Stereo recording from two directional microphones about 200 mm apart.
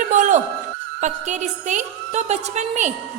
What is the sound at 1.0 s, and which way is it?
A woman's voice, 35° right (ahead or behind).